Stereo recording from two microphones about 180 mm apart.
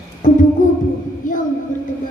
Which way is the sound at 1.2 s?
45° left (ahead or behind).